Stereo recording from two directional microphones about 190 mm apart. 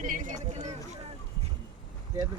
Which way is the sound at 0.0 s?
45° right (ahead or behind).